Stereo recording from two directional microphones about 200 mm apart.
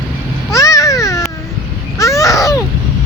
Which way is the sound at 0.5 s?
15° left (ahead or behind).